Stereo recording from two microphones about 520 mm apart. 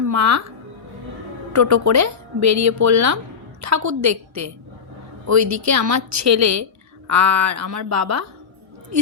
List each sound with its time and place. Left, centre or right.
0.0 s speech: right
1.5 s speech: right